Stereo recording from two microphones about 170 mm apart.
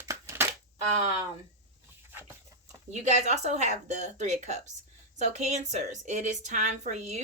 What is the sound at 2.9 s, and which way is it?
A woman's voice, 45° right (ahead or behind).